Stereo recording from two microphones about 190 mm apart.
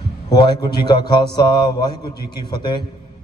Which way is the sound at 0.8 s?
25° left (ahead or behind).